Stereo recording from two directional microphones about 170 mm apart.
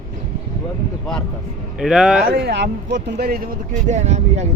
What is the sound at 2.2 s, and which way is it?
Speech, 70° right (ahead or behind).